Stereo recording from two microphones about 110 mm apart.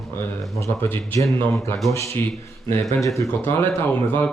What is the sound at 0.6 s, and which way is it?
A man's voice, 20° left (ahead or behind).